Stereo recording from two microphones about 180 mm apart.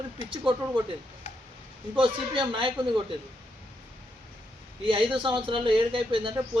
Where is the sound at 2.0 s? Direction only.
30° right (ahead or behind).